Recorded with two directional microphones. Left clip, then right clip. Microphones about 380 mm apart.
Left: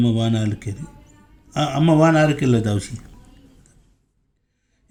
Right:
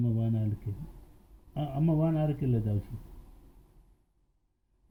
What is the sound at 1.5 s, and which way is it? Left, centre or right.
Speech, left.